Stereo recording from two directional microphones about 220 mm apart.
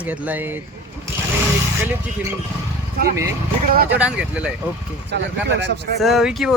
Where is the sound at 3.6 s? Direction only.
40° right (ahead or behind).